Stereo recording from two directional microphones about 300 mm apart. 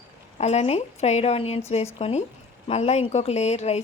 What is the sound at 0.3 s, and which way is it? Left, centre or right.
Speech, left.